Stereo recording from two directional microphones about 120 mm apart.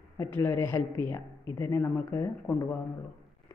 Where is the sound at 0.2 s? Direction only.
20° left (ahead or behind).